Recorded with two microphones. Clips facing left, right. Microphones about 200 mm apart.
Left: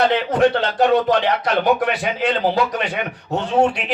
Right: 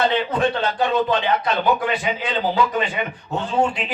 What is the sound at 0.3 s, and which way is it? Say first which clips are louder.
Speech: left 4 dB; 75° left (ahead or behind).